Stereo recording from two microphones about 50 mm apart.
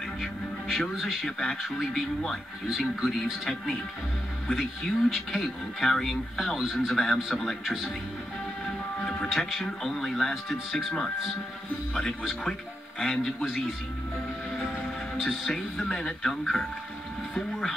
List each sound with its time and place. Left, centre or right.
0.2 s speech: centre
4.5 s speech: centre
9.0 s speech: centre
15.2 s speech: centre